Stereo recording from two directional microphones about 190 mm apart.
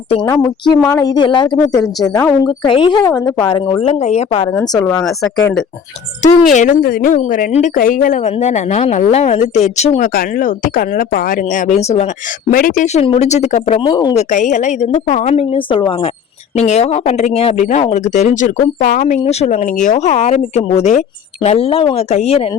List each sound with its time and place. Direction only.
0.7 s speech: 20° left (ahead or behind)
2.6 s speech: 25° left (ahead or behind)
3.8 s speech: 35° left (ahead or behind)
4.5 s speech: 15° left (ahead or behind)
6.2 s speech: 40° left (ahead or behind)
10.2 s speech: 45° left (ahead or behind)
12.5 s speech: 45° left (ahead or behind)
13.8 s speech: 20° left (ahead or behind)
14.2 s speech: 40° left (ahead or behind)